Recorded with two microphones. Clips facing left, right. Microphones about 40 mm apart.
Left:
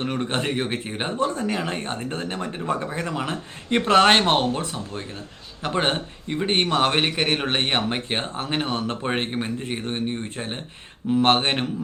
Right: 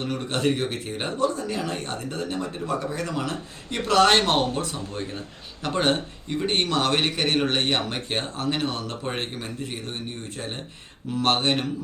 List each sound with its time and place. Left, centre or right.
0.0 s a man's voice: left
1.4 s speech: left
4.5 s a man's voice: centre; by 11.6 s left